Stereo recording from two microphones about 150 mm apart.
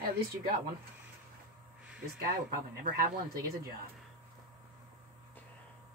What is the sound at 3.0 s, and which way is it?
Speech, 80° right.